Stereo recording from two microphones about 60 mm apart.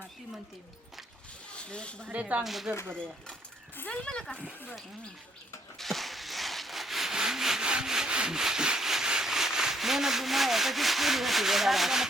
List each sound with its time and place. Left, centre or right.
1.5 s speech: centre
2.0 s speech: right
2.4 s speech: centre
4.0 s speech: centre
5.7 s rub: centre